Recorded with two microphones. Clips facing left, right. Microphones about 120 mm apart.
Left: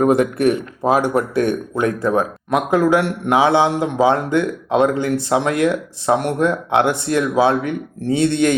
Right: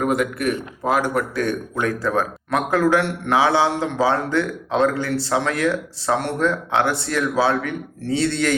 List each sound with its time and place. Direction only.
0.0 s a man's voice: 30° left (ahead or behind)